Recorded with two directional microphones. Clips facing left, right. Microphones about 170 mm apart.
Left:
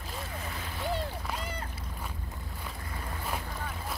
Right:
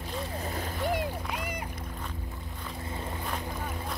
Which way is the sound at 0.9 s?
15° right (ahead or behind).